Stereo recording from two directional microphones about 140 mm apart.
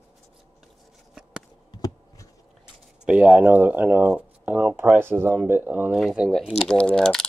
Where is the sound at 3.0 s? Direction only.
10° right (ahead or behind).